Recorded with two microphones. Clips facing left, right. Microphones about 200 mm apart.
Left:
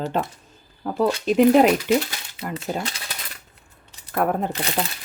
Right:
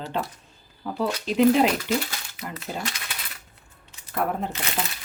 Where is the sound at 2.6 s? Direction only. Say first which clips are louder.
Left 3 dB; 35° left (ahead or behind).